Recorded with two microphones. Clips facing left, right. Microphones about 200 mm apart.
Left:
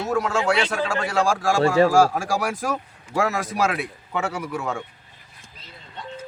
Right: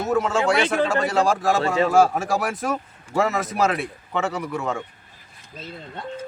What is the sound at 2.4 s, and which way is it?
A man's voice, centre (ahead or behind).